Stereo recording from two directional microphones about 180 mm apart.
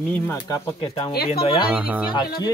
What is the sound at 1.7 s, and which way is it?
Speech, 10° right (ahead or behind).